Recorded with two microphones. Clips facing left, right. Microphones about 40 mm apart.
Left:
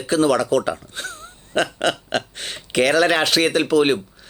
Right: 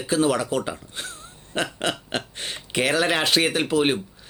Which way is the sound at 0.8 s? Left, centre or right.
Left.